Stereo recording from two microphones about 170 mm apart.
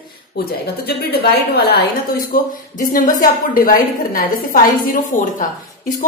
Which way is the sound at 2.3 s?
55° left (ahead or behind).